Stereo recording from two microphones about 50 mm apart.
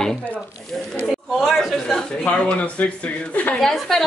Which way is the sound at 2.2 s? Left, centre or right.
Left.